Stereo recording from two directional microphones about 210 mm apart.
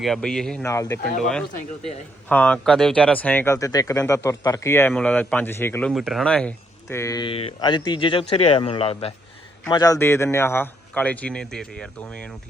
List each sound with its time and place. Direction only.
0.0 s speech: centre (ahead or behind)
0.7 s speech: 15° left (ahead or behind)
1.2 s speech: 5° left (ahead or behind)
5.9 s speech: centre (ahead or behind)